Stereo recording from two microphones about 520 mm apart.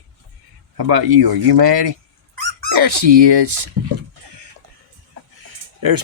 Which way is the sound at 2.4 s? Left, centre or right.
Right.